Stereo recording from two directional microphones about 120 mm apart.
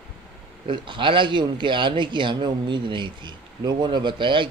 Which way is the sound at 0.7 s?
45° right (ahead or behind).